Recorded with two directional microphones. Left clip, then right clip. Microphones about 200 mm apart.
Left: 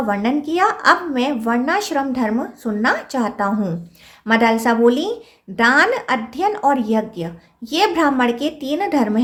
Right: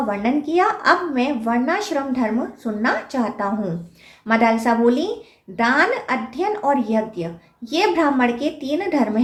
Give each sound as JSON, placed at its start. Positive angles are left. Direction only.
{"t": 0.1, "sound": "a woman's voice", "side_deg": 40}